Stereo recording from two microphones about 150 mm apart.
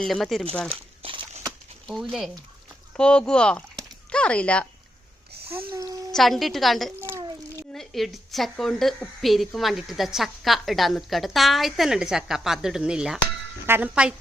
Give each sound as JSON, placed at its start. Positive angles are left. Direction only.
{"t": 0.0, "sound": "a woman's voice", "side_deg": 0}
{"t": 1.0, "sound": "a sound", "side_deg": -35}
{"t": 1.9, "sound": "a woman's voice", "side_deg": 0}
{"t": 5.7, "sound": "a child's voice", "side_deg": -20}
{"t": 6.1, "sound": "a woman's voice", "side_deg": 0}